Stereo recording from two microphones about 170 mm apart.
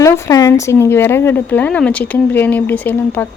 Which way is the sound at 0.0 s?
20° left (ahead or behind).